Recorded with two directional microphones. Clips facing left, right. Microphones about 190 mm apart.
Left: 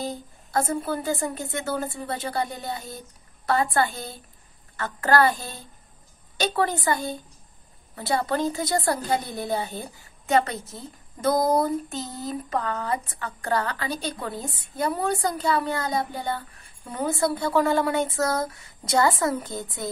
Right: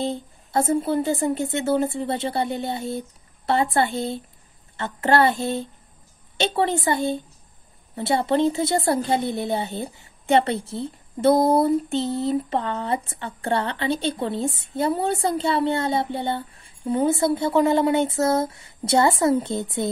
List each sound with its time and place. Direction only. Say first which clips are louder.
0.0 s a woman's voice: right 5 dB; 25° right (ahead or behind)